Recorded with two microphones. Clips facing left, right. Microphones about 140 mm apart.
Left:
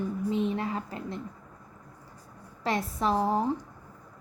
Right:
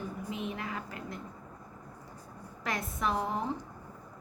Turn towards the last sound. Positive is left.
turn(degrees=35)  # may be behind; listen again after turning